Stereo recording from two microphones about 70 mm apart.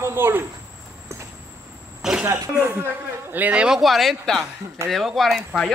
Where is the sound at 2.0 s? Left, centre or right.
Centre.